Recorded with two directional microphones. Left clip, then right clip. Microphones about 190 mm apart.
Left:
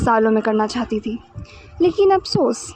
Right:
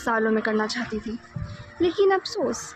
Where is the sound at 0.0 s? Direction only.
45° left (ahead or behind).